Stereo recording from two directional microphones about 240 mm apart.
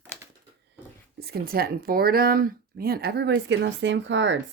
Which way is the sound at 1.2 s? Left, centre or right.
Right.